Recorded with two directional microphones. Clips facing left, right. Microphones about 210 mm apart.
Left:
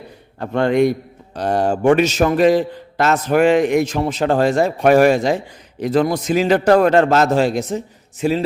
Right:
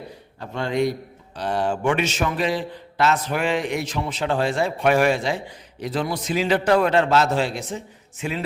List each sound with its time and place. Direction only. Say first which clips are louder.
0.3 s a man's voice: left 8 dB; 60° left (ahead or behind)
1.4 s a man's voice: left 6 dB; 45° left (ahead or behind)